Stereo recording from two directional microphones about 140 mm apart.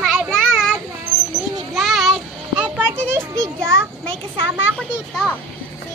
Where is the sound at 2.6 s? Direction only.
15° right (ahead or behind).